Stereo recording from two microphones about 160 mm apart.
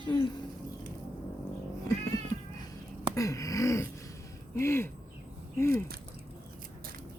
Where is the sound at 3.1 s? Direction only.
20° left (ahead or behind).